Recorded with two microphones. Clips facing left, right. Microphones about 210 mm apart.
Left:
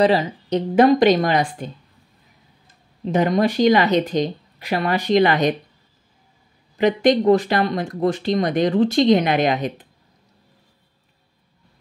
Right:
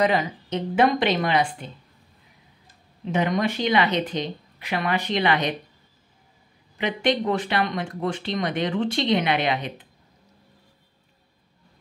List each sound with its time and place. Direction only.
0.0 s speech: 30° left (ahead or behind)
3.1 s speech: 35° left (ahead or behind)
6.8 s speech: 40° left (ahead or behind)